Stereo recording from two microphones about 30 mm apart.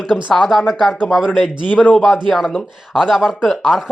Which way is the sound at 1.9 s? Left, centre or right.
Centre.